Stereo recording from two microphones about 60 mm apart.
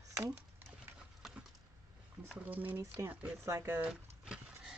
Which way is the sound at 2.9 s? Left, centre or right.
Right.